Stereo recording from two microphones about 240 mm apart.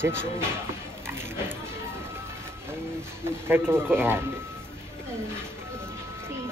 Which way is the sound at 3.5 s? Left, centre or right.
Centre.